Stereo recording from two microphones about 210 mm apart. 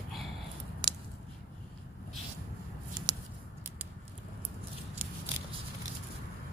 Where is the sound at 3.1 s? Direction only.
20° right (ahead or behind).